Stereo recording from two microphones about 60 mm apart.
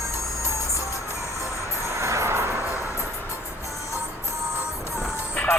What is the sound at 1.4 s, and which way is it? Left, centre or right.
Music, right.